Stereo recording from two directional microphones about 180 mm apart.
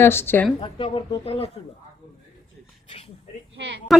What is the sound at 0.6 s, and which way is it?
Speech, 30° left (ahead or behind).